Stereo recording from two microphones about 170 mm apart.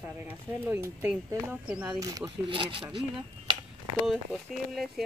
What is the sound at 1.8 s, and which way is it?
Speech, 20° right (ahead or behind).